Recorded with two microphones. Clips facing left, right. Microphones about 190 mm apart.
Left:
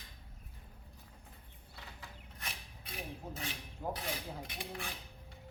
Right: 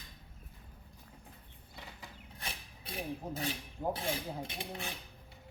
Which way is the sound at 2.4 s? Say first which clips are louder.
Right 3 dB; 30° right (ahead or behind).